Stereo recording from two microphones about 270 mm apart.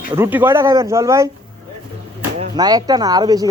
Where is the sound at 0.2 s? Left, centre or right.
Centre.